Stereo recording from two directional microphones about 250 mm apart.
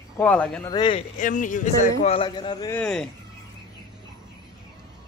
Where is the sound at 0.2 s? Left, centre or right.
Centre.